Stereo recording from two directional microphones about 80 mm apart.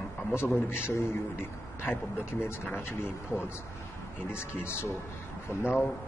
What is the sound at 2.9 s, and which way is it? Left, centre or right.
A man's voice, left.